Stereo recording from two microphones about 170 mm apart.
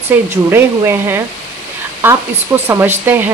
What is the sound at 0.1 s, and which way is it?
Speech, 10° right (ahead or behind).